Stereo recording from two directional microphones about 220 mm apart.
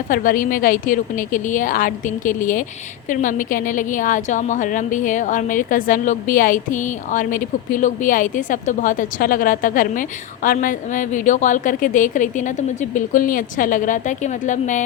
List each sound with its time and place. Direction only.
0.1 s a woman's voice: 40° left (ahead or behind)